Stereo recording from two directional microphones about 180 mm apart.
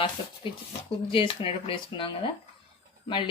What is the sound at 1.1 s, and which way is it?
Speech, 30° left (ahead or behind).